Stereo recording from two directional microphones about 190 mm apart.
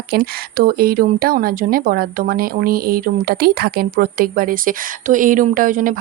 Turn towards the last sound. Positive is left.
turn(degrees=-45)  # may be behind; listen again after turning